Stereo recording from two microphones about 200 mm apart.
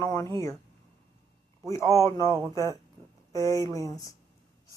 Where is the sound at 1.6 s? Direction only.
15° left (ahead or behind).